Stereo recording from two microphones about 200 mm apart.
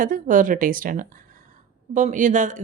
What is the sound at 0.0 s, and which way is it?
A woman's voice, 40° right (ahead or behind).